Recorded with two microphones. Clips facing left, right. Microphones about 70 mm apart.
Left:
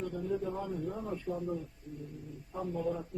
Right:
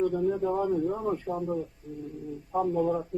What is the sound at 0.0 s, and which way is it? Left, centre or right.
A man's voice, right.